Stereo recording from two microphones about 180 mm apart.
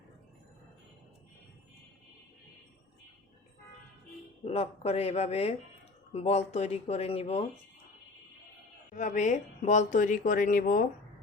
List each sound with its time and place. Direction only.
4.4 s speech: 35° left (ahead or behind)
9.0 s speech: 45° left (ahead or behind)